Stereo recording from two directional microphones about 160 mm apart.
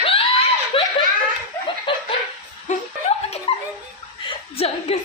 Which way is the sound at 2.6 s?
45° left (ahead or behind).